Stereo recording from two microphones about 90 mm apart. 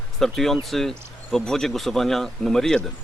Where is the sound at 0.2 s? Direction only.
5° left (ahead or behind).